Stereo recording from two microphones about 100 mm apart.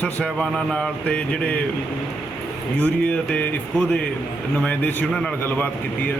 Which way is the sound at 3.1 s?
15° left (ahead or behind).